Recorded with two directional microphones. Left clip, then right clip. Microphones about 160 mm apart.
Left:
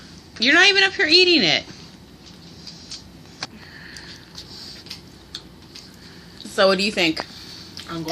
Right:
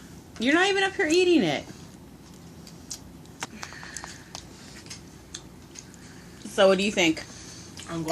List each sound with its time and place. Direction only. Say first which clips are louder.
0.3 s a woman's voice: left 8 dB; 5° right (ahead or behind)
6.6 s a woman's voice: left 3 dB; 10° left (ahead or behind)